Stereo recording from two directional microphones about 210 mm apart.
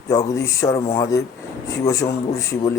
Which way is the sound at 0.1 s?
15° left (ahead or behind).